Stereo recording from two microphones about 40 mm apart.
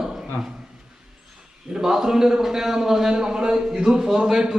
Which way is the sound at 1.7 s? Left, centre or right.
Centre.